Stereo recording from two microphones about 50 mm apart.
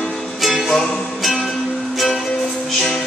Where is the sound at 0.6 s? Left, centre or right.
Centre.